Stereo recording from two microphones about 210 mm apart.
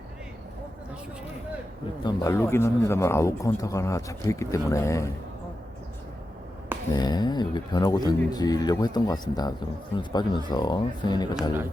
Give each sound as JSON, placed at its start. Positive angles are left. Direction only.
{"t": 2.0, "sound": "speech", "side_deg": 15}
{"t": 6.9, "sound": "speech", "side_deg": 20}